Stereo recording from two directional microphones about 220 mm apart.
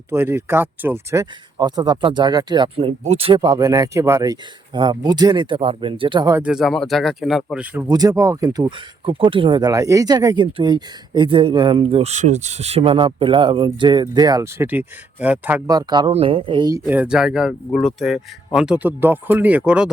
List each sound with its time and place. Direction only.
0.1 s speech: 10° right (ahead or behind)
6.4 s speech: centre (ahead or behind)